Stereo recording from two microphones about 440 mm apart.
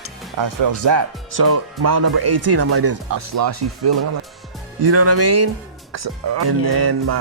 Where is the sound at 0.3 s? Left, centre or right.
Right.